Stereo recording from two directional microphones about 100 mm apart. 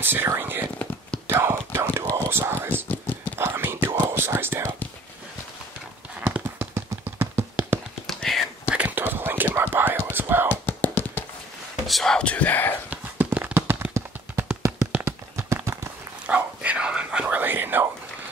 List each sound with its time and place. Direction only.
0.0 s speech: 20° right (ahead or behind)
1.2 s a sound: 25° right (ahead or behind)
2.0 s whispering: 25° right (ahead or behind)
2.7 s a sound: 20° left (ahead or behind)
3.3 s whispering: 20° right (ahead or behind)
6.2 s clip-clop: 20° right (ahead or behind)
8.1 s whispering: 5° left (ahead or behind)
8.6 s whispering: 15° right (ahead or behind)
10.5 s a sound: 20° left (ahead or behind)
11.9 s a sound: 5° left (ahead or behind)
12.9 s clip-clop: 15° right (ahead or behind)
15.0 s horse: 30° right (ahead or behind)
16.3 s whispering: 15° right (ahead or behind)